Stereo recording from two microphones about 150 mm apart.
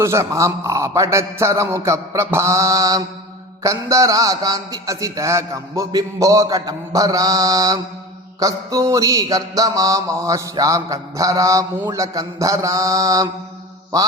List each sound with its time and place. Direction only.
0.0 s mantra: 20° right (ahead or behind)